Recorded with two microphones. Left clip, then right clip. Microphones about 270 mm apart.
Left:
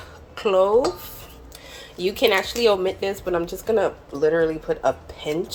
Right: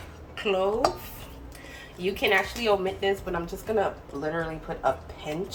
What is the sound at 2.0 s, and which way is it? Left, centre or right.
Speech, left.